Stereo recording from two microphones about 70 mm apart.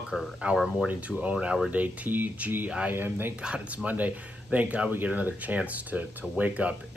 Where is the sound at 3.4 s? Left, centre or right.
Centre.